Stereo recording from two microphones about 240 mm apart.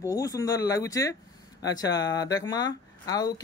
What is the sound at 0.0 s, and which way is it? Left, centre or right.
Speech, centre.